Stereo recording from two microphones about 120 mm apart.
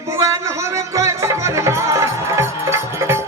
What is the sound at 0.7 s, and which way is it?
Music, 25° right (ahead or behind).